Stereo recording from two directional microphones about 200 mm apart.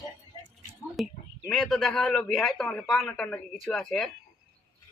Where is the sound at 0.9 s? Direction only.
Centre (ahead or behind).